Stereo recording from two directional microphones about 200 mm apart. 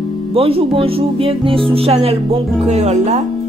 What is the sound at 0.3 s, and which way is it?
Speech, 30° right (ahead or behind).